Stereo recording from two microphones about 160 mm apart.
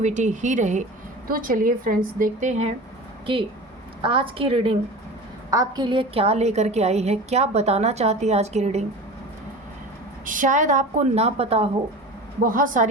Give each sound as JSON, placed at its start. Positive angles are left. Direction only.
{"t": 0.0, "sound": "a woman's voice", "side_deg": -50}
{"t": 1.3, "sound": "a woman's voice", "side_deg": -60}
{"t": 4.0, "sound": "a woman's voice", "side_deg": -35}
{"t": 5.5, "sound": "a woman's voice", "side_deg": -25}
{"t": 10.2, "sound": "a woman's voice", "side_deg": -55}
{"t": 12.4, "sound": "a woman's voice", "side_deg": -60}